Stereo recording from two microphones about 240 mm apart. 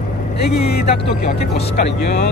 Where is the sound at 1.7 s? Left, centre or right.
Left.